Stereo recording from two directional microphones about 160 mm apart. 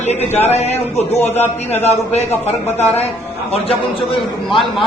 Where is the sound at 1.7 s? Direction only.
40° left (ahead or behind).